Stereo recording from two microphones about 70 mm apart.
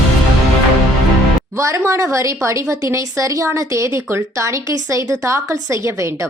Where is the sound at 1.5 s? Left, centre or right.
Right.